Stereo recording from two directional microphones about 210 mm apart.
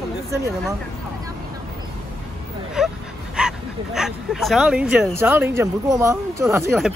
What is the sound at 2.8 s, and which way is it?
Dog, 5° right (ahead or behind).